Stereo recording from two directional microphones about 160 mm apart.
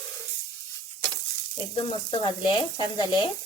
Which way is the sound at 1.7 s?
30° left (ahead or behind).